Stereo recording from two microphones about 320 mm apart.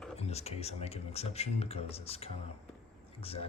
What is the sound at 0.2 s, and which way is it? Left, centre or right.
Speech, centre.